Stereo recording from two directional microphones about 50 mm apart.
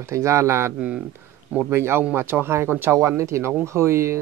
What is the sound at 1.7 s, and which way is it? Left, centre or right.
Speech, right.